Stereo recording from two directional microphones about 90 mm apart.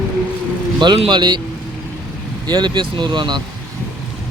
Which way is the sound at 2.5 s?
55° right (ahead or behind).